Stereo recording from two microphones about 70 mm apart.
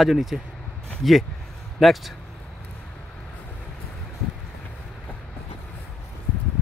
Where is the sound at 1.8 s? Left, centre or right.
Centre.